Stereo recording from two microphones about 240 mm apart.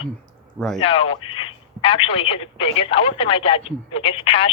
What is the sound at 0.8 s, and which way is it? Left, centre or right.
Speech, left.